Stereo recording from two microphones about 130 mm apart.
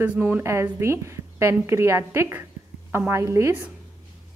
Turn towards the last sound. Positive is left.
turn(degrees=-15)  # may be behind; listen again after turning